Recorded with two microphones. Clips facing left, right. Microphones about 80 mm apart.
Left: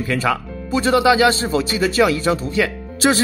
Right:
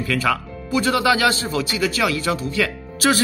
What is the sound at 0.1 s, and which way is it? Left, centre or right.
Speech, left.